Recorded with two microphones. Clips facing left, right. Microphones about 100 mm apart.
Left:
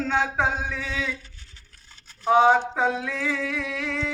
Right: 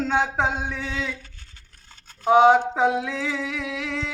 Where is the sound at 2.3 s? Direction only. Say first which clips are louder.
Right 3 dB; 20° right (ahead or behind).